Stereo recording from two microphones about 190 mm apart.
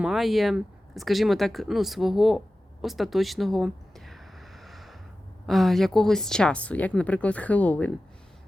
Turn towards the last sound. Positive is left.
turn(degrees=5)  # may be behind; listen again after turning